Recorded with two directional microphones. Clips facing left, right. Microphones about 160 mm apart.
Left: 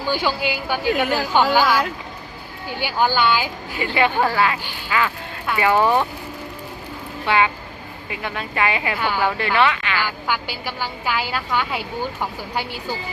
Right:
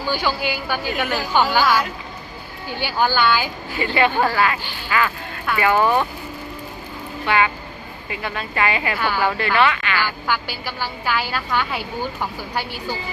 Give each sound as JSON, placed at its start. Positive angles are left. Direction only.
{"t": 0.1, "sound": "speech", "side_deg": 20}
{"t": 2.6, "sound": "a woman's voice", "side_deg": 15}
{"t": 4.4, "sound": "speech", "side_deg": 20}
{"t": 7.3, "sound": "a woman's voice", "side_deg": 20}